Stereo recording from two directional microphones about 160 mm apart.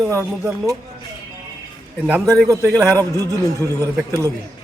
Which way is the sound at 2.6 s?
10° left (ahead or behind).